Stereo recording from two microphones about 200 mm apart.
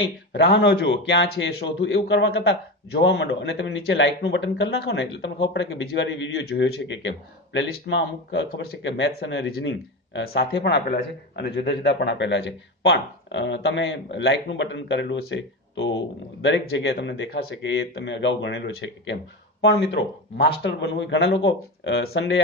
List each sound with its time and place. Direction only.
0.3 s speech: 60° left (ahead or behind)